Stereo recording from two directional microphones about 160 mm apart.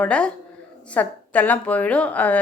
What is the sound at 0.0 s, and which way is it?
A woman's voice, 5° left (ahead or behind).